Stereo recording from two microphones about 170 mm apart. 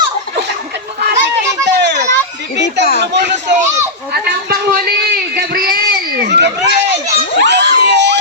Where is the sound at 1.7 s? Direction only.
90° right.